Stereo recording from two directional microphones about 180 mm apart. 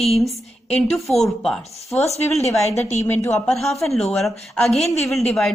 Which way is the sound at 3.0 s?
15° left (ahead or behind).